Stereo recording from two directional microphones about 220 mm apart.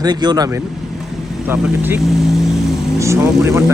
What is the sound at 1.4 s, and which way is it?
Speech, 5° right (ahead or behind).